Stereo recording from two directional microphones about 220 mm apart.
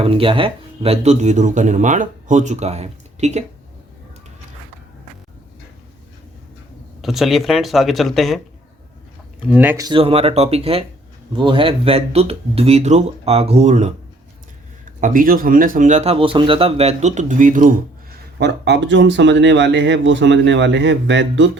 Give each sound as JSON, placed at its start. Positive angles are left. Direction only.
{"t": 0.0, "sound": "speech", "side_deg": -25}
{"t": 7.0, "sound": "speech", "side_deg": 0}
{"t": 9.5, "sound": "speech", "side_deg": -10}
{"t": 15.0, "sound": "speech", "side_deg": -40}
{"t": 18.3, "sound": "speech", "side_deg": -50}